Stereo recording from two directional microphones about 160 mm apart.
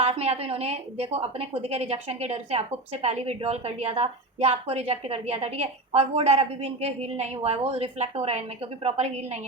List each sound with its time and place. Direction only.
0.0 s a woman's voice: 40° right (ahead or behind)